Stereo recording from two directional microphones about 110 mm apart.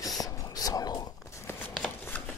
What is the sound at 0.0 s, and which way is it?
Whispering, 35° left (ahead or behind).